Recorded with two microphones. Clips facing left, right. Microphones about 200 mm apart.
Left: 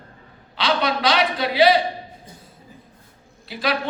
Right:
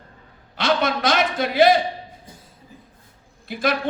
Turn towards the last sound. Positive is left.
turn(degrees=-50)  # may be behind; listen again after turning